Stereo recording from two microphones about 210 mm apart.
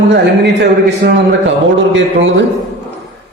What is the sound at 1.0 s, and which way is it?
Speech, 50° right (ahead or behind).